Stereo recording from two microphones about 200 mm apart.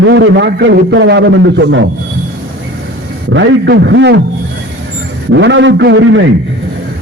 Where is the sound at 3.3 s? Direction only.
60° right (ahead or behind).